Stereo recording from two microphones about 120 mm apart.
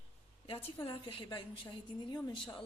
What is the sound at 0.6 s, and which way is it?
A woman's voice, 45° left (ahead or behind).